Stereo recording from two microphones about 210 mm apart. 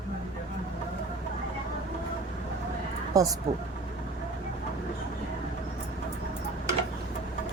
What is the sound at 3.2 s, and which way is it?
Speech, 15° right (ahead or behind).